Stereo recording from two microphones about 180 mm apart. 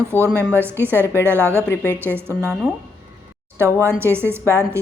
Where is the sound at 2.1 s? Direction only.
15° right (ahead or behind).